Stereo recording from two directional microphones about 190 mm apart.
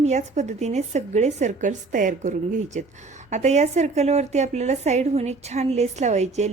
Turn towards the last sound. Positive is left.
turn(degrees=-35)  # may be behind; listen again after turning